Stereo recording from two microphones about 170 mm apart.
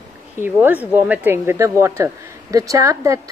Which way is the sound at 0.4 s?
10° right (ahead or behind).